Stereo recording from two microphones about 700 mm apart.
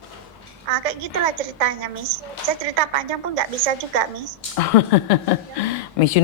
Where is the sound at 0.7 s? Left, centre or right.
Right.